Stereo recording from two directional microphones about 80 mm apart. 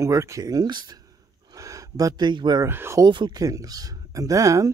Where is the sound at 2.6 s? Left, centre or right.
Right.